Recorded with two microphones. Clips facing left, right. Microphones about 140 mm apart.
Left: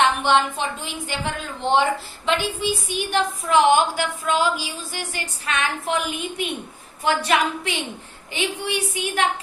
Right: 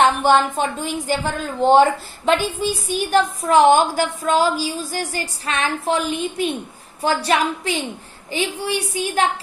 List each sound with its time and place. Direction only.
0.0 s a woman's voice: 40° right (ahead or behind)